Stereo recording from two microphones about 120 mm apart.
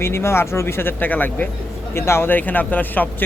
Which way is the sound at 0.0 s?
20° left (ahead or behind).